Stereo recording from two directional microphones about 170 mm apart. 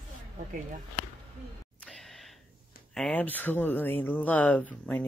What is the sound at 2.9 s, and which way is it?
Speech, 5° left (ahead or behind).